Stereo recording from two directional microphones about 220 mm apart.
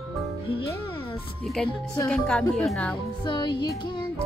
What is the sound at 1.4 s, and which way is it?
Speech, centre (ahead or behind).